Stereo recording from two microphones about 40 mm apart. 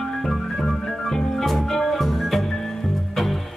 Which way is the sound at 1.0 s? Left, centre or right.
Centre.